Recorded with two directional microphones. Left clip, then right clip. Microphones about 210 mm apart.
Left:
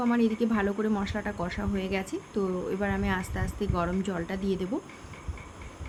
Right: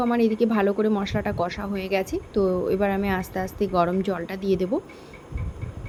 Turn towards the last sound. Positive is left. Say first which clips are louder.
# right 7 dB
turn(degrees=-15)  # may be behind; listen again after turning